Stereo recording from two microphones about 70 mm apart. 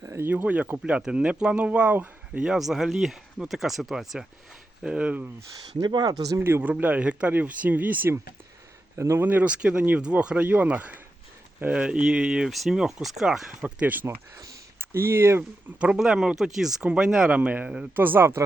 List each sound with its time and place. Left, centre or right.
0.0 s a sound: right
0.3 s speech: right
2.5 s speech: centre
5.8 s speech: right
6.4 s speech: right
9.0 s speech: right
9.2 s speech: right
12.5 s speech: centre; by 15.4 s right
15.8 s speech: centre; by 18.3 s right